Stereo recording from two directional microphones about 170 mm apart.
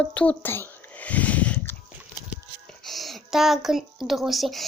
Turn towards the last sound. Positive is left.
turn(degrees=0)  # may be behind; listen again after turning